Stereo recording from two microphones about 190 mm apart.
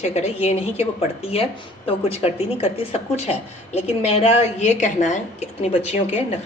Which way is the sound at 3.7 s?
30° left (ahead or behind).